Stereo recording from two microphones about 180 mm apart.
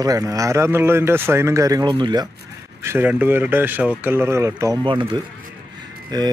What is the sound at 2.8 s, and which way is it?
Speech, 10° right (ahead or behind).